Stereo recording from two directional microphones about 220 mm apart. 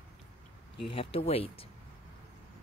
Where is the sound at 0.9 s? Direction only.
25° left (ahead or behind).